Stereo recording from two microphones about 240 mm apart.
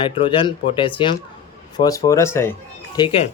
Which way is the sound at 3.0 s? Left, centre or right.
Left.